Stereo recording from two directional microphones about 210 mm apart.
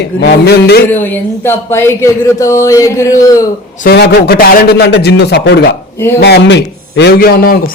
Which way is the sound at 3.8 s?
50° left (ahead or behind).